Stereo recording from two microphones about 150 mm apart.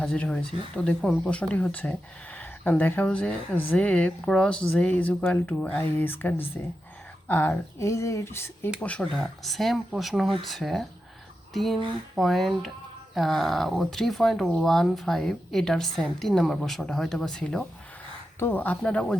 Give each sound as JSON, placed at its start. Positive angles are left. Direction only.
{"t": 0.0, "sound": "speech", "side_deg": 5}